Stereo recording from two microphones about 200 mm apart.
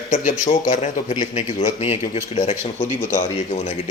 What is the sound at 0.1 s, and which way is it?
A man's voice, 40° left (ahead or behind).